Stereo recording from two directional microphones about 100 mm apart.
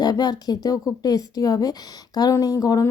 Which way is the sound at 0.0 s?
45° left (ahead or behind).